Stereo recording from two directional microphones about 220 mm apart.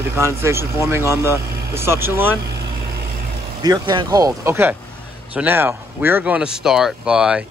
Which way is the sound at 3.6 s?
20° right (ahead or behind).